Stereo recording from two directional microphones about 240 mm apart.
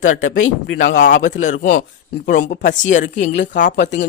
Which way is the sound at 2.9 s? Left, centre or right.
Left.